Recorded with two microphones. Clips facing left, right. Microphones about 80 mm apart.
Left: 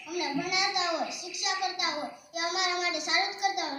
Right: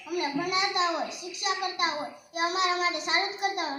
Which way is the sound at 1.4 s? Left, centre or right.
Right.